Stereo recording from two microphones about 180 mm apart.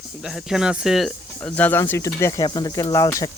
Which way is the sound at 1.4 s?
10° left (ahead or behind).